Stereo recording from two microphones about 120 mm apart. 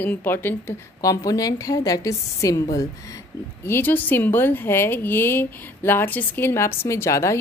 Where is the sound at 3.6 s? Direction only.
15° left (ahead or behind).